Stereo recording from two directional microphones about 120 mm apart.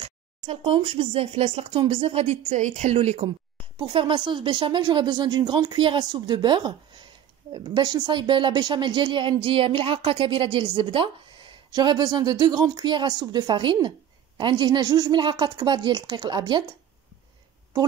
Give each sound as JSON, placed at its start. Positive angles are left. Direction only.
{"t": 0.0, "sound": "speech", "side_deg": -60}
{"t": 3.7, "sound": "speech", "side_deg": -45}